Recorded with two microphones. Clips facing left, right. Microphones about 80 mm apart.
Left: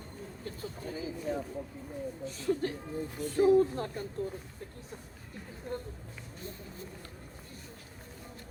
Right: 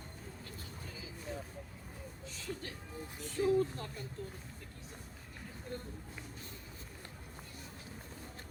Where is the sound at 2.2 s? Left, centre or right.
Left.